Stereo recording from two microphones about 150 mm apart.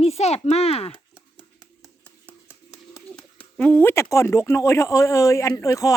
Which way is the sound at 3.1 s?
10° left (ahead or behind).